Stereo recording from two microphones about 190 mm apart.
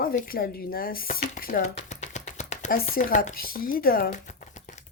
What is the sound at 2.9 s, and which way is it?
Speech, 45° left (ahead or behind).